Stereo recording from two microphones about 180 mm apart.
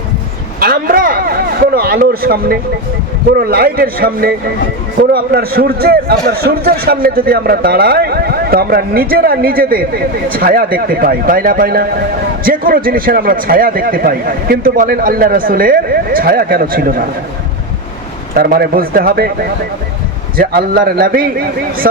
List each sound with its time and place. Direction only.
0.6 s a sound: 55° right (ahead or behind)
3.3 s a man's voice: 60° right (ahead or behind)
18.3 s a man's voice: 60° right (ahead or behind)
20.3 s a man's voice: 55° right (ahead or behind)